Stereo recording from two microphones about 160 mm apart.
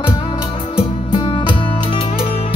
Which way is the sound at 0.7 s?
35° left (ahead or behind).